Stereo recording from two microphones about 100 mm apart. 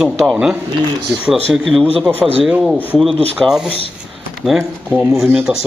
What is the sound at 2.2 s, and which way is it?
Speech, 15° right (ahead or behind).